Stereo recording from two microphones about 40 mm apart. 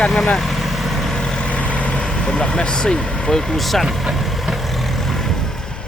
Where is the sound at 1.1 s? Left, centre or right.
Left.